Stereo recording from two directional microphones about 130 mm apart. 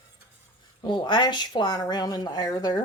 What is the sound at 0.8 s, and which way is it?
Speech, 35° left (ahead or behind).